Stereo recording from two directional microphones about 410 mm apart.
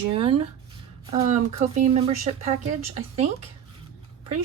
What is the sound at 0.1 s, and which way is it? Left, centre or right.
Speech, centre.